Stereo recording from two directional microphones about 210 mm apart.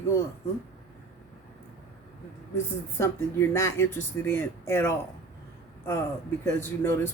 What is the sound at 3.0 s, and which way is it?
Speech, 10° left (ahead or behind).